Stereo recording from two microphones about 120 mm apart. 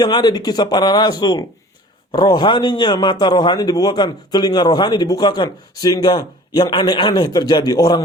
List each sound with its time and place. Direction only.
0.0 s a man's voice: 35° left (ahead or behind)